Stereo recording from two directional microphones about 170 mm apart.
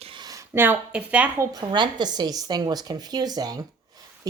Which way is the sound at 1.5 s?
25° right (ahead or behind).